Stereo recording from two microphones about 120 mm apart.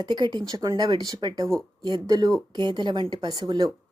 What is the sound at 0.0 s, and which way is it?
Speech, 35° right (ahead or behind).